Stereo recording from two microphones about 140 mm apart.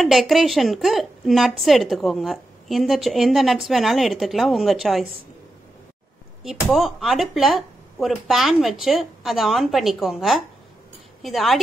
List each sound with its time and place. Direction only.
0.0 s a woman's voice: centre (ahead or behind)
6.4 s a woman's voice: centre (ahead or behind)